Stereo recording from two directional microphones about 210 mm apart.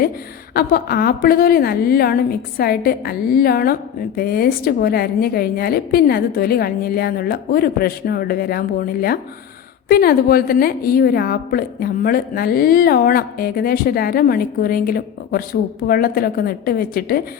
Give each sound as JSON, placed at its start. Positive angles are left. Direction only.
{"t": 0.5, "sound": "a woman's voice", "side_deg": 45}